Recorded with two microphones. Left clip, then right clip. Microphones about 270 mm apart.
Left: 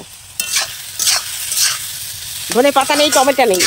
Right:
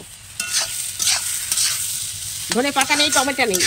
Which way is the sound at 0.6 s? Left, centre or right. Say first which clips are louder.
Left 3 dB; centre.